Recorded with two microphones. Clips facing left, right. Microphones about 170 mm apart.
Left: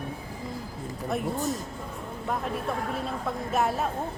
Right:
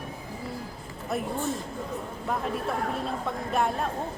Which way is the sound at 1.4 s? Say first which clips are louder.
Left 1 dB; 40° left (ahead or behind).